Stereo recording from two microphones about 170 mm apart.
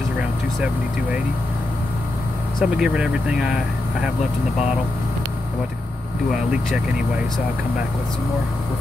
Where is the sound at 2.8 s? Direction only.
5° right (ahead or behind).